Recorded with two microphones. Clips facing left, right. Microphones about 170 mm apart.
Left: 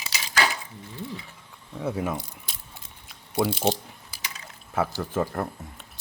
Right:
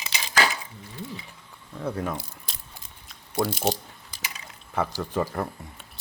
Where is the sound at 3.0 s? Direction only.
5° left (ahead or behind).